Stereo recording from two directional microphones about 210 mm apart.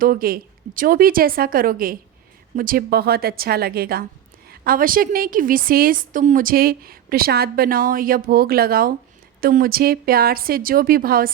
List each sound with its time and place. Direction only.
0.0 s a woman's voice: 45° right (ahead or behind)